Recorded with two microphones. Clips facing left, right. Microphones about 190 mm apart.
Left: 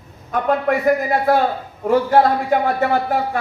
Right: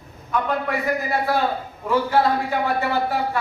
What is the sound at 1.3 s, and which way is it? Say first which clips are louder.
Speech: left 5 dB; 50° left (ahead or behind).